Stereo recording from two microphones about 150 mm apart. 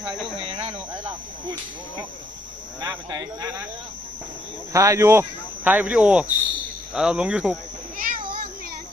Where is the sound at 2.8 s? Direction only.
25° right (ahead or behind).